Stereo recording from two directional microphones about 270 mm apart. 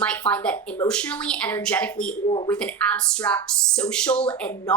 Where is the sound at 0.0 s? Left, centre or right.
Centre.